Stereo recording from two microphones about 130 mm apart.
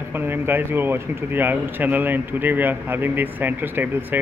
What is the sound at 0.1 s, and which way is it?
Speech, 15° right (ahead or behind).